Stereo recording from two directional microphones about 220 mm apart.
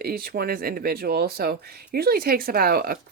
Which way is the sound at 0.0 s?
45° right (ahead or behind).